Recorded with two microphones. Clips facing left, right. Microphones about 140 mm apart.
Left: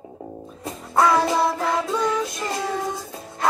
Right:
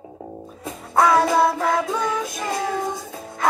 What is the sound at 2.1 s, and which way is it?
Music, 50° right (ahead or behind).